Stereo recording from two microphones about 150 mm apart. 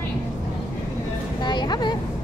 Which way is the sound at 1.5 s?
30° left (ahead or behind).